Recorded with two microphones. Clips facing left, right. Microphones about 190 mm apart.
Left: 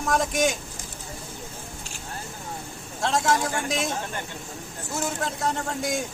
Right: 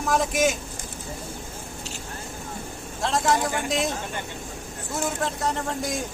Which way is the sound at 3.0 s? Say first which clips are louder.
Even; centre (ahead or behind).